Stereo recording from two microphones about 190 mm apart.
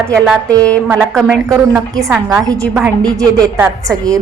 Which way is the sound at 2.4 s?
15° right (ahead or behind).